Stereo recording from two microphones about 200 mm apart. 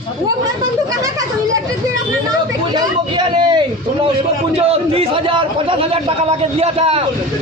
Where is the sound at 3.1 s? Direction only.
20° right (ahead or behind).